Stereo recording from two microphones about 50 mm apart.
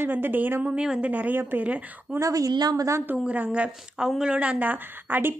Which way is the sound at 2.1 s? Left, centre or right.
Right.